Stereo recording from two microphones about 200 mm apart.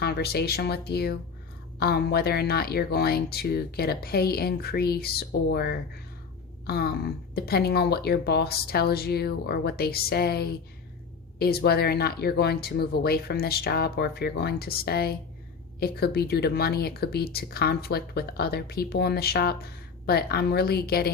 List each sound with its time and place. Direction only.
0.0 s speech: 55° left (ahead or behind)